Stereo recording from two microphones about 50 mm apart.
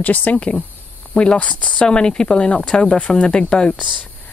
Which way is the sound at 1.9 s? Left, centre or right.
Centre.